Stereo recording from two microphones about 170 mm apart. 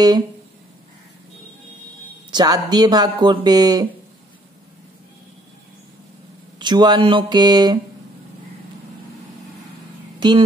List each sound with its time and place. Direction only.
2.3 s speech: 25° right (ahead or behind)
6.6 s speech: 25° right (ahead or behind)
10.2 s speech: 25° right (ahead or behind)